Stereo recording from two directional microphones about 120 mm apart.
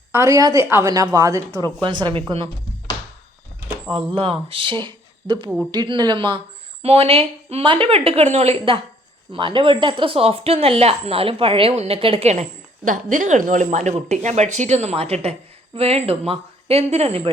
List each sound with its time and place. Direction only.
0.1 s a woman's voice: 25° right (ahead or behind)
1.5 s speech: 35° right (ahead or behind)
4.1 s speech: 50° right (ahead or behind); by 13.9 s 90° right
14.1 s speech: 75° right (ahead or behind); by 17.3 s 55° right (ahead or behind)